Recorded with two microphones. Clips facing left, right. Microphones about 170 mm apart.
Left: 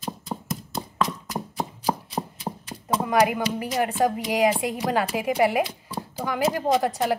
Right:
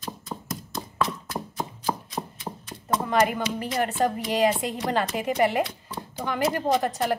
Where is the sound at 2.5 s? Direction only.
25° left (ahead or behind).